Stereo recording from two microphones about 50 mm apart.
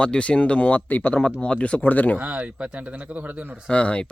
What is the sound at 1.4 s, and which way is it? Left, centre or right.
Speech, left.